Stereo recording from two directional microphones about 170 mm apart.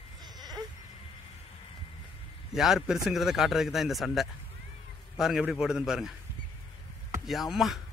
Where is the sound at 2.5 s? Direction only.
Centre (ahead or behind).